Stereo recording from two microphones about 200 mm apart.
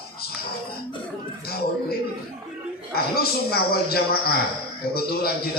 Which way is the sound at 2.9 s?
50° left (ahead or behind).